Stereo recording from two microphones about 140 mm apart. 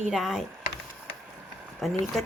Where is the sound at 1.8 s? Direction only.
Centre (ahead or behind).